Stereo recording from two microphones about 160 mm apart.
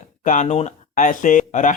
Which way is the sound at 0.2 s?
50° left (ahead or behind).